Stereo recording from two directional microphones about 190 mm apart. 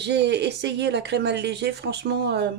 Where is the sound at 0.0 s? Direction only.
65° right (ahead or behind).